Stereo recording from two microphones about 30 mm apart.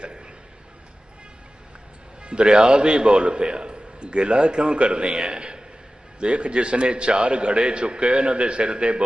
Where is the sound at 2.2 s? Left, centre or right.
Right.